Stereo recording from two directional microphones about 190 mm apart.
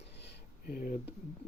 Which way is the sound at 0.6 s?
45° left (ahead or behind).